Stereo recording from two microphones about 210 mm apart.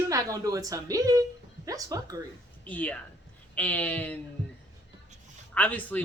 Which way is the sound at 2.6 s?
5° left (ahead or behind).